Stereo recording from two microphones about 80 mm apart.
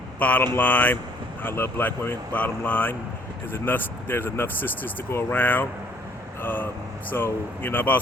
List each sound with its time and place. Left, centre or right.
0.2 s speech: centre